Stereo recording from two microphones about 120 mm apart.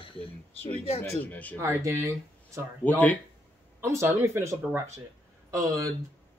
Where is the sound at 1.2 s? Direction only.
15° left (ahead or behind).